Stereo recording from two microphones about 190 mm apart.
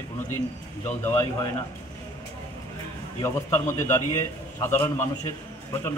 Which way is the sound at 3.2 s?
15° left (ahead or behind).